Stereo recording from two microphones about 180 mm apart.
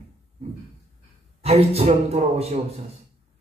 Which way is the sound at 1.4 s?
35° right (ahead or behind).